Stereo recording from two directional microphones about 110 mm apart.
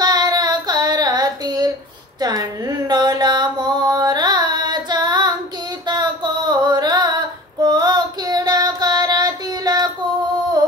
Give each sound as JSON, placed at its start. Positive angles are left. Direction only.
{"t": 0.0, "sound": "child singing", "side_deg": -40}
{"t": 2.1, "sound": "a sound", "side_deg": -35}
{"t": 5.9, "sound": "female singing", "side_deg": -40}